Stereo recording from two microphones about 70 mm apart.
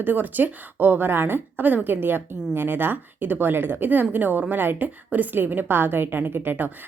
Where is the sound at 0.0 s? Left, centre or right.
Right.